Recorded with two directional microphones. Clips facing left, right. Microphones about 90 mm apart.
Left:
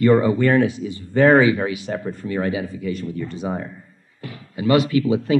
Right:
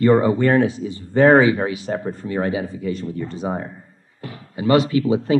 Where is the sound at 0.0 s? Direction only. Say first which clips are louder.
Even; 30° right (ahead or behind).